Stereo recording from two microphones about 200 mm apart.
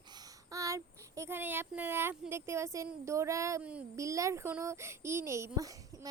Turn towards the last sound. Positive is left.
turn(degrees=-15)  # may be behind; listen again after turning